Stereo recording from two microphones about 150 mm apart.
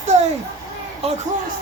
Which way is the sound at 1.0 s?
45° right (ahead or behind).